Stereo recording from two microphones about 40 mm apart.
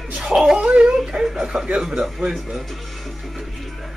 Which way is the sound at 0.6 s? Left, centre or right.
Right.